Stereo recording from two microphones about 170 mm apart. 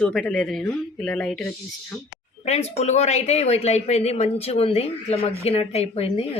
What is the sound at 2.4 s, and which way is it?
Speech, 40° left (ahead or behind).